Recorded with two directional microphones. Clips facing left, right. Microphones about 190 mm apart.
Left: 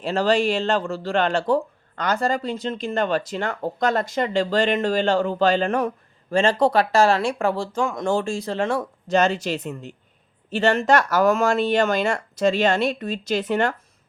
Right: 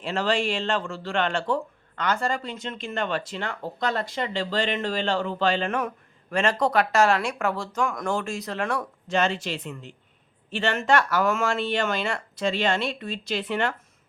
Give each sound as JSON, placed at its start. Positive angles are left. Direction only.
{"t": 0.0, "sound": "speech", "side_deg": 40}
{"t": 9.0, "sound": "speech", "side_deg": 40}